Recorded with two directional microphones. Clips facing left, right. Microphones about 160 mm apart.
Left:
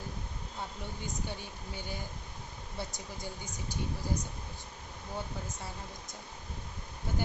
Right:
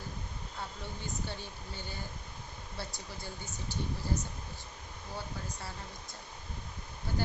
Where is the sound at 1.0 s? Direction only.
15° left (ahead or behind).